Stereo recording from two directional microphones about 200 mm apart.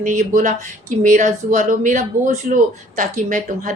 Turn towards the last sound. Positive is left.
turn(degrees=-40)  # may be behind; listen again after turning